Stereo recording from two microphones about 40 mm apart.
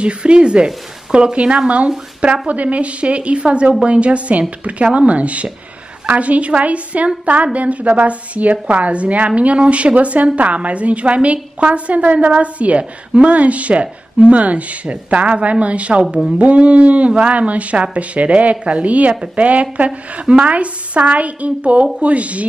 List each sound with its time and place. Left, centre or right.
0.0 s a woman's voice: right